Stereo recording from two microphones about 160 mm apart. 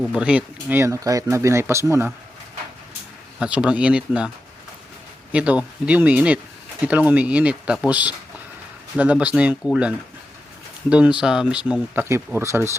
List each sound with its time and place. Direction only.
0.0 s speech: 5° right (ahead or behind)
3.4 s speech: 5° right (ahead or behind)
5.3 s speech: 10° right (ahead or behind)